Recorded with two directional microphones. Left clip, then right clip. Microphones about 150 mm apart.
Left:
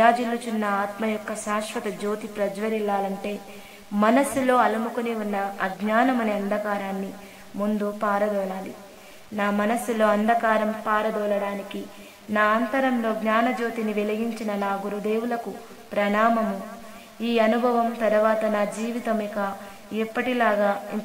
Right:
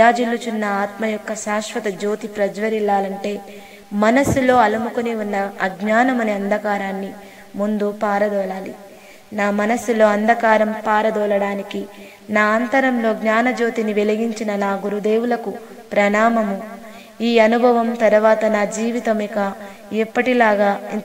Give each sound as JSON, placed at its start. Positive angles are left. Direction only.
{"t": 0.0, "sound": "a woman's voice", "side_deg": -30}